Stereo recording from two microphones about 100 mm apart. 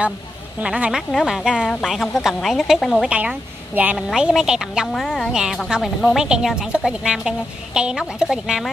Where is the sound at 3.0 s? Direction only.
10° right (ahead or behind).